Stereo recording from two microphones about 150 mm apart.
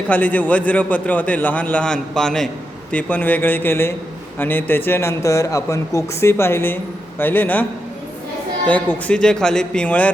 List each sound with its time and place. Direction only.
0.1 s speech: 10° left (ahead or behind)
8.6 s speech: 10° left (ahead or behind)